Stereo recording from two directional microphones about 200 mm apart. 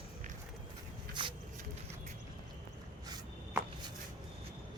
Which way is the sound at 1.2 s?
25° right (ahead or behind).